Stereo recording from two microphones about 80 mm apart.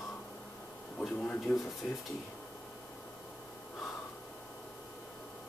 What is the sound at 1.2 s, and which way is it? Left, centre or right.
Speech, centre.